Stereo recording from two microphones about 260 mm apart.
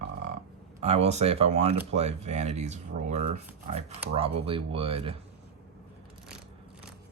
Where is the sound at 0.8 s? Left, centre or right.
Right.